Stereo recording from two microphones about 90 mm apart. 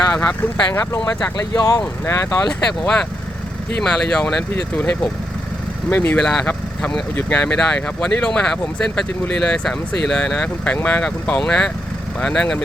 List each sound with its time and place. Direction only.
0.1 s speech: 10° left (ahead or behind)
1.0 s speech: 40° left (ahead or behind)
2.5 s speech: 10° left (ahead or behind)